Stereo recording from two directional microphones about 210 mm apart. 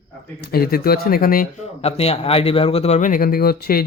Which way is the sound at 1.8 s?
30° left (ahead or behind).